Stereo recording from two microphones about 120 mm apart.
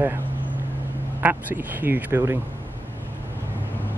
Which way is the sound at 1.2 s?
15° right (ahead or behind).